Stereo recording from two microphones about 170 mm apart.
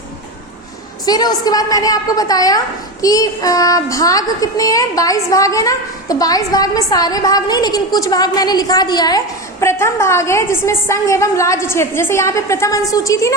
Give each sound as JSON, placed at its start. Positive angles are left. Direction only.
{"t": 1.0, "sound": "child singing", "side_deg": 20}